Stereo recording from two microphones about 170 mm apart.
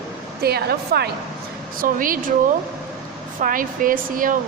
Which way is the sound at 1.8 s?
55° right (ahead or behind).